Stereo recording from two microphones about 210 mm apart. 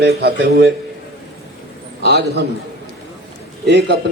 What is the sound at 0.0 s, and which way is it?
Speech, 50° right (ahead or behind).